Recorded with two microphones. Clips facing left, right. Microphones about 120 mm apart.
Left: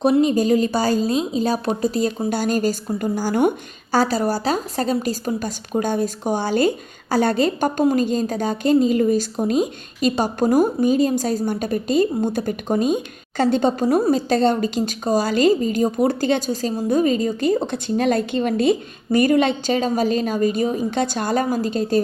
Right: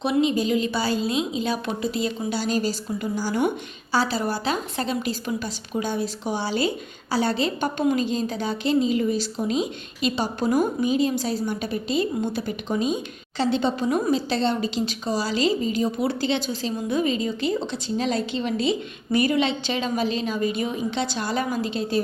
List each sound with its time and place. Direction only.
0.0 s a woman's voice: 45° left (ahead or behind)